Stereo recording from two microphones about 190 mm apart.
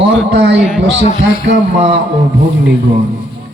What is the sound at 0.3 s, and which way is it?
Speech, 65° right (ahead or behind).